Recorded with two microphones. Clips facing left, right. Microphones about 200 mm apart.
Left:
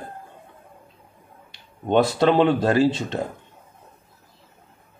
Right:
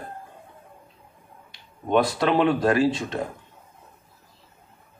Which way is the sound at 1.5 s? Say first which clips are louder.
Left 3 dB; 25° left (ahead or behind).